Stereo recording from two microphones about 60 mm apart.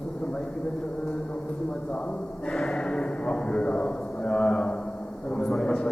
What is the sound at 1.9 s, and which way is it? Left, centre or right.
A man's voice, centre.